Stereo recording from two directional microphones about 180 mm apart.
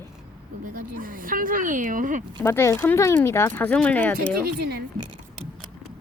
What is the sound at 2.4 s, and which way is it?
Speech, 15° left (ahead or behind).